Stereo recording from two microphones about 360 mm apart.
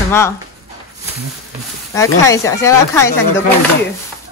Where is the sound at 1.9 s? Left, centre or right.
Centre.